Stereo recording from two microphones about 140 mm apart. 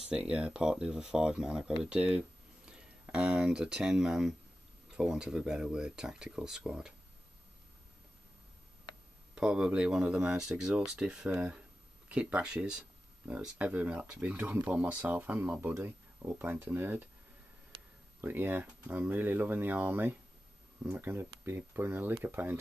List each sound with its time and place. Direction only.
0.1 s speech: 5° right (ahead or behind)
9.4 s speech: 5° right (ahead or behind)
18.2 s speech: 15° right (ahead or behind)